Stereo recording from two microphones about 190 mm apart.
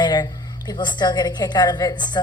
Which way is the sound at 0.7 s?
25° left (ahead or behind).